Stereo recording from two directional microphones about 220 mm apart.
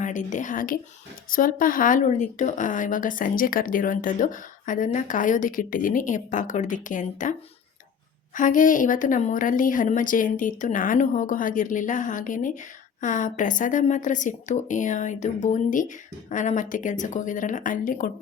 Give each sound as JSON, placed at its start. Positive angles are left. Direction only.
{"t": 0.0, "sound": "speech", "side_deg": 35}
{"t": 8.4, "sound": "speech", "side_deg": 35}